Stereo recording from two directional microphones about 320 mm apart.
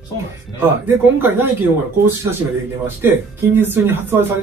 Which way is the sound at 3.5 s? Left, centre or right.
Centre.